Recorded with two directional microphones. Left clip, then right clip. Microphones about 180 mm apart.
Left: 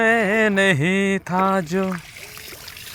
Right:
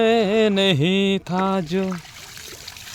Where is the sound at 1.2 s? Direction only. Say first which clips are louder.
Left 3 dB; 30° right (ahead or behind).